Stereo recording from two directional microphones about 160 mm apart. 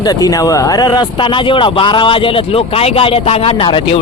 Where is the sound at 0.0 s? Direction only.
25° left (ahead or behind).